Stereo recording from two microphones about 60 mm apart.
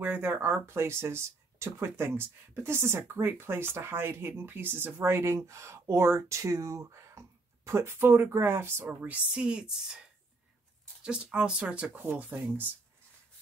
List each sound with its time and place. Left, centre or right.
0.0 s speech: right
9.0 s speech: centre